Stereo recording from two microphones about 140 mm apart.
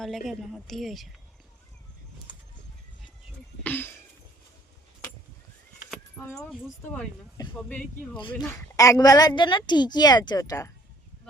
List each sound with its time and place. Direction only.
0.3 s speech: centre (ahead or behind)
3.6 s a sound: 15° left (ahead or behind)
6.8 s speech: 10° left (ahead or behind)
8.4 s a woman's voice: 25° left (ahead or behind)